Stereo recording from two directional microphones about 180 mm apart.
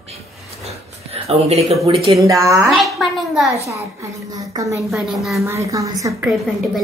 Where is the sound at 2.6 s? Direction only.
Centre (ahead or behind).